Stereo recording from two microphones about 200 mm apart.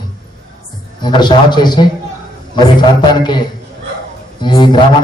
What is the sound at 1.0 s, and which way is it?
A man's voice, 20° left (ahead or behind).